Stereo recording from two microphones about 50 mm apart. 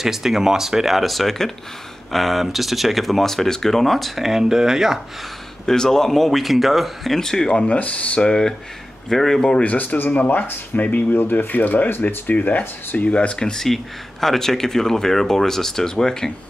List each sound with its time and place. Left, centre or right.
0.0 s speech: centre
5.7 s speech: centre
7.2 s speech: centre
7.5 s speech: left; by 9.6 s centre
9.6 s speech: left
13.5 s speech: centre